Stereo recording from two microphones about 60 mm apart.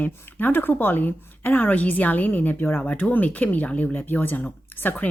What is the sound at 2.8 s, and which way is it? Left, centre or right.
A woman's voice, left.